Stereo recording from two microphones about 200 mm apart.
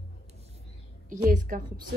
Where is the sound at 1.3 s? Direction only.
40° right (ahead or behind).